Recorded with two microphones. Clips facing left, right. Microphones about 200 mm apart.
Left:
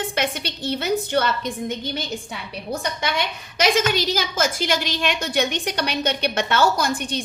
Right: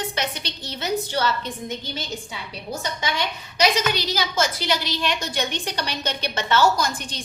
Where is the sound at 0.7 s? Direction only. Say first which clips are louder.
Left 4 dB; 55° left (ahead or behind).